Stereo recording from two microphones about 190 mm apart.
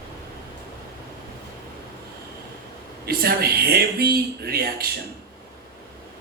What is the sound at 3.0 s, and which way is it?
Speech, 55° right (ahead or behind).